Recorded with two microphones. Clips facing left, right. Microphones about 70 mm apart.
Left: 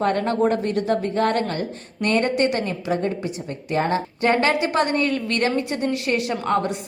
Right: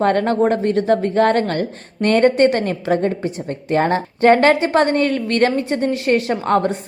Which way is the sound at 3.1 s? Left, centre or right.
Right.